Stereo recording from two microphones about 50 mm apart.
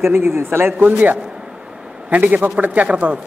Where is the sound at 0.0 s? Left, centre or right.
Right.